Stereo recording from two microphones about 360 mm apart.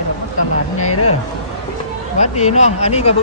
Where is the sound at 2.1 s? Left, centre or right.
Centre.